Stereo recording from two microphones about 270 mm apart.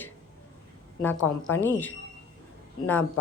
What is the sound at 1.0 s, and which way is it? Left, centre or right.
A woman's voice, centre.